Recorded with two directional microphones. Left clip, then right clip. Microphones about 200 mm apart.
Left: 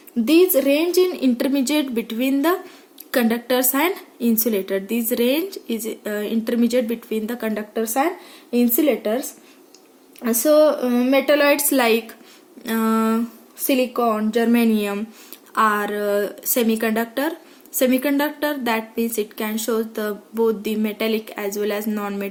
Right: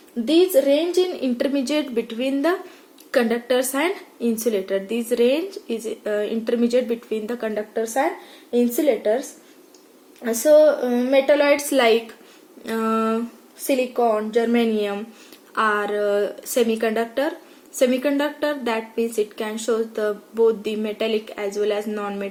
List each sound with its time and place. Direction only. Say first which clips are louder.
0.5 s speech: even; 45° left (ahead or behind)
8.5 s a woman's voice: even; 50° left (ahead or behind)
10.2 s a woman's voice: right 1 dB; 50° left (ahead or behind)